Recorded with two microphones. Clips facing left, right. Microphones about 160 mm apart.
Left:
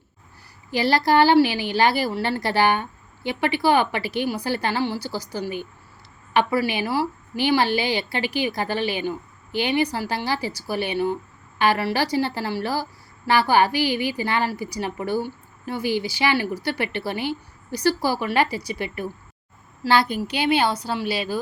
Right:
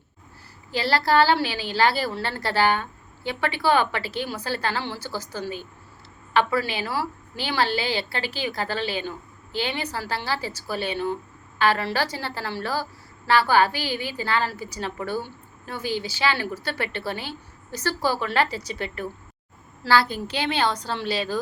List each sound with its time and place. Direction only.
0.7 s a woman's voice: 15° left (ahead or behind)